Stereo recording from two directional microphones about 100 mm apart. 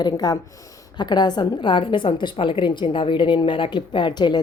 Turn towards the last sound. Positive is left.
turn(degrees=45)  # may be behind; listen again after turning